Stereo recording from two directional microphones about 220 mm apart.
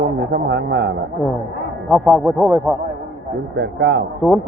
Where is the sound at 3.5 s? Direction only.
50° right (ahead or behind).